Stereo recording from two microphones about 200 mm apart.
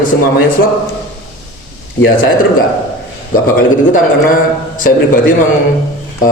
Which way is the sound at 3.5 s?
45° left (ahead or behind).